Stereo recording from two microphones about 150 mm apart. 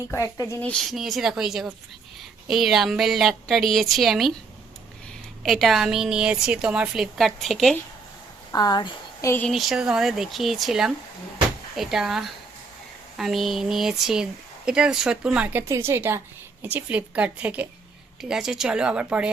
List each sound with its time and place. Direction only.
0.1 s a woman's voice: 20° left (ahead or behind)
0.6 s a woman's voice: 5° left (ahead or behind)
5.4 s a woman's voice: centre (ahead or behind)
8.5 s speech: 25° left (ahead or behind)
9.5 s a woman's voice: centre (ahead or behind)